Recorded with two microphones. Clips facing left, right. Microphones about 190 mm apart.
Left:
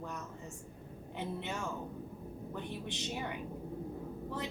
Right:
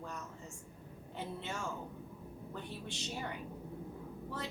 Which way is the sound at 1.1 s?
15° left (ahead or behind).